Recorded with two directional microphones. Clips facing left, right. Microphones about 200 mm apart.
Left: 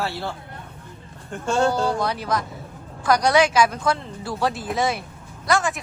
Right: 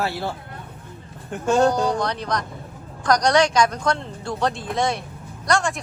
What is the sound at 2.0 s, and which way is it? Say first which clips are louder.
A man's voice: left 1 dB; 5° left (ahead or behind).